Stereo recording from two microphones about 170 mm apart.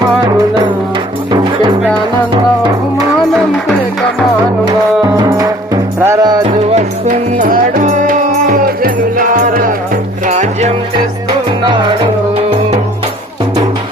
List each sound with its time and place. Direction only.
5.1 s music: 20° right (ahead or behind)
6.4 s music: 35° right (ahead or behind)
7.1 s music: 55° right (ahead or behind)
11.6 s music: 30° right (ahead or behind)